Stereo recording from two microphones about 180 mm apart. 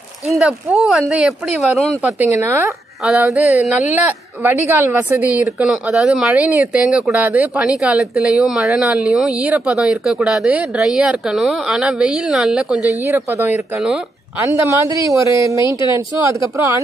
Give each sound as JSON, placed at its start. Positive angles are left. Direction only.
{"t": 0.3, "sound": "speech", "side_deg": 0}
{"t": 2.1, "sound": "speech", "side_deg": -10}